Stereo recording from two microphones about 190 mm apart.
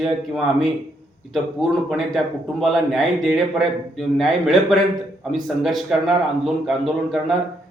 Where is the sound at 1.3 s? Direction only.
Centre (ahead or behind).